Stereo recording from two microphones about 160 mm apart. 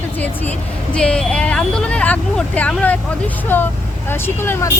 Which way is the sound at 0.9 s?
5° left (ahead or behind).